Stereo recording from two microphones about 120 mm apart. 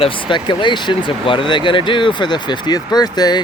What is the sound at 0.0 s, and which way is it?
Speech, 45° left (ahead or behind).